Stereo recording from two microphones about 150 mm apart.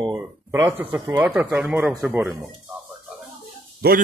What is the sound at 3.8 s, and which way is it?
Speech, 90° right.